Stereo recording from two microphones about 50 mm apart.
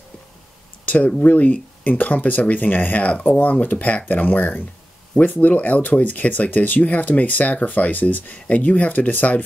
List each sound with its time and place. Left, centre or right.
0.8 s speech: left